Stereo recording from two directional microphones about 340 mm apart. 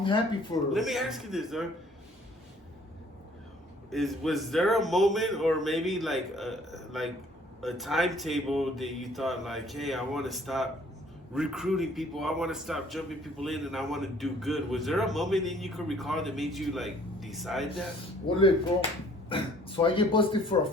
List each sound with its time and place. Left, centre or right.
0.0 s speech: centre
0.7 s a man's voice: centre
3.9 s a man's voice: centre
19.3 s speech: centre